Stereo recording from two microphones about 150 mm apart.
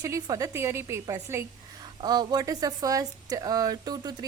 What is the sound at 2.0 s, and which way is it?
Speech, 25° right (ahead or behind).